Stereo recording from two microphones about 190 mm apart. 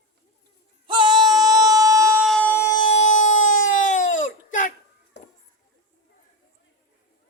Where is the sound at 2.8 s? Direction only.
35° left (ahead or behind).